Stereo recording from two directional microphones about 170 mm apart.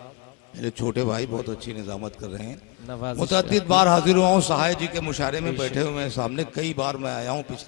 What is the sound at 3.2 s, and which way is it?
A man's voice, 10° left (ahead or behind).